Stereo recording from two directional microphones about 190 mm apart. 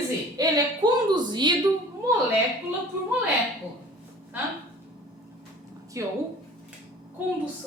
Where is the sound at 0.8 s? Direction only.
20° right (ahead or behind).